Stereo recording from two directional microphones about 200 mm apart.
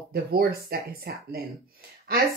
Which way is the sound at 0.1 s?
50° right (ahead or behind).